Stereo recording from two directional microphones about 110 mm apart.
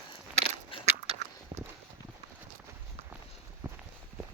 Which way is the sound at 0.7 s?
55° left (ahead or behind).